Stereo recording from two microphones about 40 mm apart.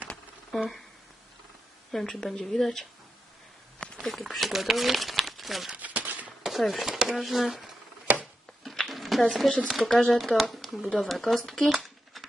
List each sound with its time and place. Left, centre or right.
0.5 s speech: centre
1.9 s a woman's voice: centre
4.0 s speech: centre
5.7 s a sound: right
6.4 s chopping: centre
6.8 s speech: centre
7.2 s speech: centre
8.1 s a sound: right
8.6 s a sound: centre
9.6 s speech: centre